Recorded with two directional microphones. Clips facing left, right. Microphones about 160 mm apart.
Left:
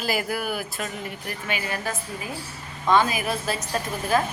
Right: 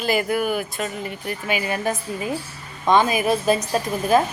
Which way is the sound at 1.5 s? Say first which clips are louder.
Right 6 dB; 20° right (ahead or behind).